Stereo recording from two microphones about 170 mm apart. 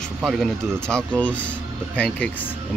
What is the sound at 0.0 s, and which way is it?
Speech, centre (ahead or behind).